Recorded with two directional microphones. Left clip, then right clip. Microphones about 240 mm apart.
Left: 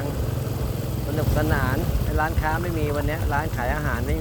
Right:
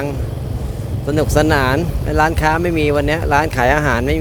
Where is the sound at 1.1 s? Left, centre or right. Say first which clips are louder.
Right 11 dB; right.